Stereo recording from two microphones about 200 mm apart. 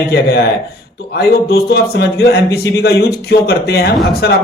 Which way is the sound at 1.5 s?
55° left (ahead or behind).